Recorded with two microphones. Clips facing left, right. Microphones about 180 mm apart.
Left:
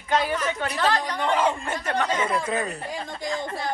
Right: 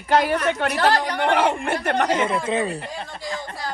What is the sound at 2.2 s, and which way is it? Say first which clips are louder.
Speech: right 3 dB; 25° right (ahead or behind).